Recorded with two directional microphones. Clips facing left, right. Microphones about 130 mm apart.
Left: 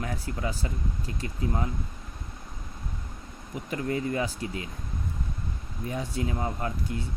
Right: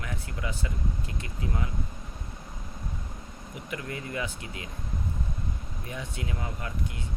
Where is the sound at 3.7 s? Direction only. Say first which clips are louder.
Left 7 dB; 35° left (ahead or behind).